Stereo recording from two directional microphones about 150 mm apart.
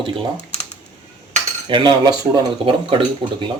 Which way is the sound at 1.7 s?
30° right (ahead or behind).